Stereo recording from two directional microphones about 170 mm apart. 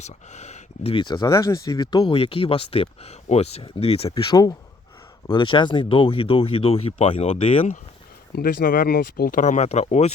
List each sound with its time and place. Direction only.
0.0 s speech: 40° left (ahead or behind)
8.3 s speech: 65° left (ahead or behind); by 10.1 s 40° left (ahead or behind)